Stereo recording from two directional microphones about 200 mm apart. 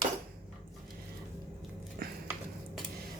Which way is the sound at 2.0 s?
45° right (ahead or behind).